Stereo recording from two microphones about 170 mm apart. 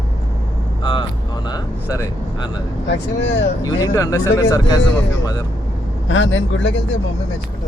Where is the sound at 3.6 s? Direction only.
20° left (ahead or behind).